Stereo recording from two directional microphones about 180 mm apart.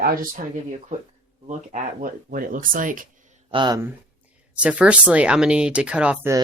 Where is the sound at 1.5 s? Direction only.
40° right (ahead or behind).